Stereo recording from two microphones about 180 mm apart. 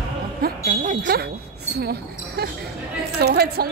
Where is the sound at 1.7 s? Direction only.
60° right (ahead or behind).